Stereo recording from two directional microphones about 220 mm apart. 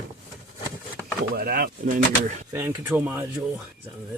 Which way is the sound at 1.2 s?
45° right (ahead or behind).